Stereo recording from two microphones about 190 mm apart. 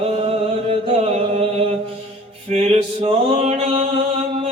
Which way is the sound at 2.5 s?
35° right (ahead or behind).